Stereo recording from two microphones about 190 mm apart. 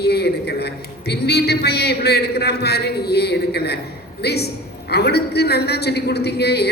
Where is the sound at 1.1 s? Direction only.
60° left (ahead or behind).